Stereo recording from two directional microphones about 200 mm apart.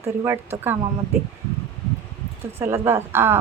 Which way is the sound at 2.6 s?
10° right (ahead or behind).